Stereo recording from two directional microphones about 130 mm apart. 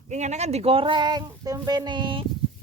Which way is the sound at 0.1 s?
60° right (ahead or behind).